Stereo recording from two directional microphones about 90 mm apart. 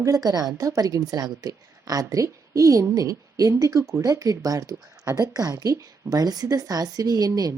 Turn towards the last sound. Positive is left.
turn(degrees=-45)  # may be behind; listen again after turning